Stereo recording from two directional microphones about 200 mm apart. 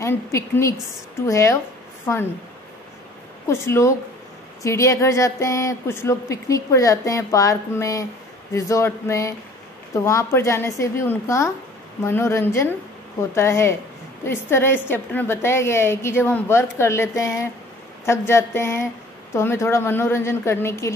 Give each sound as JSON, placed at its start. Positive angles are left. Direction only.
{"t": 0.0, "sound": "speech", "side_deg": 15}
{"t": 3.4, "sound": "speech", "side_deg": 15}